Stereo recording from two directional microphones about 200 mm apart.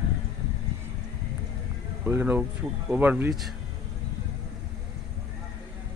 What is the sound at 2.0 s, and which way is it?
Speech, 10° right (ahead or behind).